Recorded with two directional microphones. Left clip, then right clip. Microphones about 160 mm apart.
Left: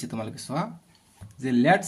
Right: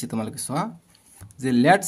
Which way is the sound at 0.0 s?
35° right (ahead or behind).